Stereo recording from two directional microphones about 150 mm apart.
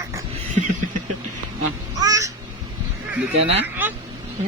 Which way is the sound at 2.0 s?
25° right (ahead or behind).